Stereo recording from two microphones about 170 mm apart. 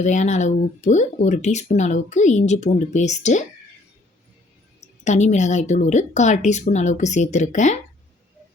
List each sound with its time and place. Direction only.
0.0 s speech: 45° left (ahead or behind)
4.8 s speech: 45° left (ahead or behind)